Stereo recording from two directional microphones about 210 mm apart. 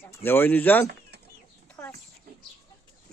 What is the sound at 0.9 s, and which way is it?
Bird, 50° right (ahead or behind).